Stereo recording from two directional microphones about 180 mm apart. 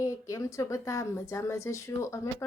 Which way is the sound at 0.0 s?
15° left (ahead or behind).